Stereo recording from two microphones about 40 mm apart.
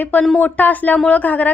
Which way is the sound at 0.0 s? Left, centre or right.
Left.